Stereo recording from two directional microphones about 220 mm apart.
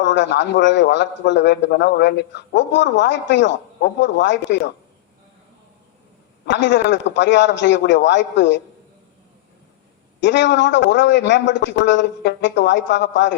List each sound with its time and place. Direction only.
0.0 s a man's voice: 55° left (ahead or behind)
6.4 s a man's voice: 55° left (ahead or behind)
10.2 s a man's voice: 55° left (ahead or behind)